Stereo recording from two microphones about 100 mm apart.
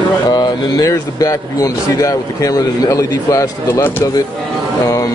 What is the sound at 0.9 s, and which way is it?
Speech, 35° left (ahead or behind).